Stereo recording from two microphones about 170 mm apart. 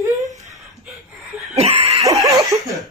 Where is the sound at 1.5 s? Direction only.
35° right (ahead or behind).